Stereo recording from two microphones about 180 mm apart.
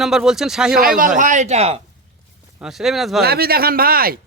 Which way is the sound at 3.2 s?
60° right (ahead or behind).